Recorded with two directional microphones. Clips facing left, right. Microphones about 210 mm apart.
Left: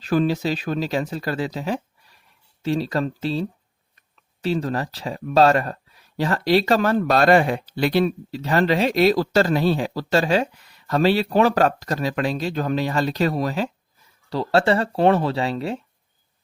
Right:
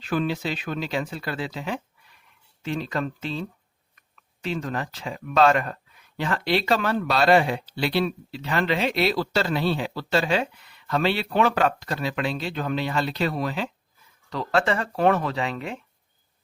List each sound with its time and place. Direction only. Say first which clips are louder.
0.0 s speech: left 5 dB; 40° left (ahead or behind)